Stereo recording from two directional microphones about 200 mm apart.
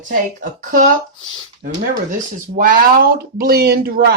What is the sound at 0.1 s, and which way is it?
Speech, 45° right (ahead or behind).